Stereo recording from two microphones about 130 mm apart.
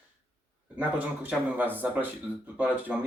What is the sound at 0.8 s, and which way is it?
Speech, 10° right (ahead or behind).